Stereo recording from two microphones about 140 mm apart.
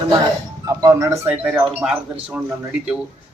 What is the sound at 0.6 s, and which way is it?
Speech, 20° right (ahead or behind).